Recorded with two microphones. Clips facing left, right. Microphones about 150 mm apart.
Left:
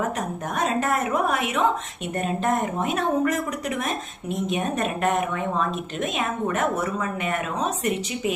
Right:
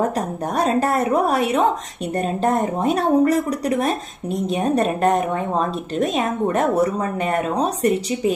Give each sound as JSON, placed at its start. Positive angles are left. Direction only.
{"t": 0.5, "sound": "speech", "side_deg": -35}